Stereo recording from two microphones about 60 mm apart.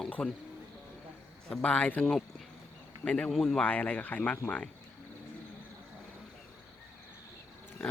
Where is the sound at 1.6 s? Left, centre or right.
Left.